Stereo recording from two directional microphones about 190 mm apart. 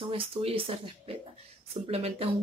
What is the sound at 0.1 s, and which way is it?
Speech, 30° right (ahead or behind).